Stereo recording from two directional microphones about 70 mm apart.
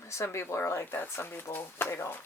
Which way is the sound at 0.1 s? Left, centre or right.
Left.